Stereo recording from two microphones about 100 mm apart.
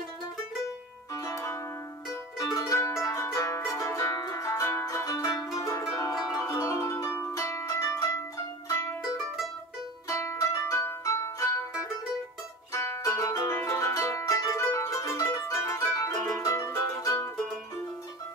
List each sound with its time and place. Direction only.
1.1 s music: 35° left (ahead or behind)
6.4 s zither: 30° left (ahead or behind)
8.6 s music: 25° left (ahead or behind)
10.0 s music: 30° left (ahead or behind)
12.7 s music: 25° left (ahead or behind)